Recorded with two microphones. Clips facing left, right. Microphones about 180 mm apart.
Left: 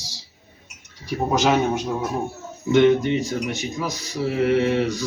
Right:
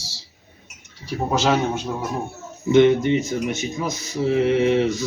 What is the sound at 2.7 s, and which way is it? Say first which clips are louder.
Speech: right 1 dB; 20° right (ahead or behind).